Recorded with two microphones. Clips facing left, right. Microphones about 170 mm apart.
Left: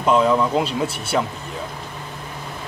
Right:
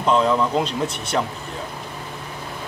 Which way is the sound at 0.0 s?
5° left (ahead or behind).